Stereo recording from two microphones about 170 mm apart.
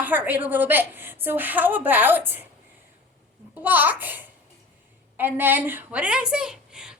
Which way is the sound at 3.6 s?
10° right (ahead or behind).